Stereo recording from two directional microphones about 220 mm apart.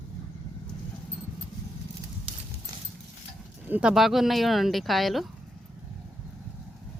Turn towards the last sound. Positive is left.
turn(degrees=0)  # may be behind; listen again after turning